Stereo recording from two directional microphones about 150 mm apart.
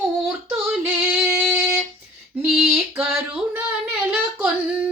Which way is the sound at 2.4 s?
5° right (ahead or behind).